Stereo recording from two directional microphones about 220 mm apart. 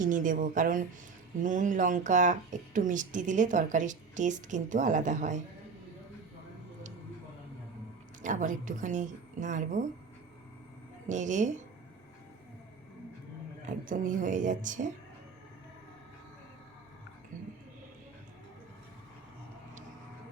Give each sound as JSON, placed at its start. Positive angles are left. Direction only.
{"t": 0.0, "sound": "speech", "side_deg": -35}
{"t": 8.2, "sound": "speech", "side_deg": -35}
{"t": 11.1, "sound": "speech", "side_deg": -35}
{"t": 13.7, "sound": "speech", "side_deg": -35}
{"t": 17.3, "sound": "a sound", "side_deg": -35}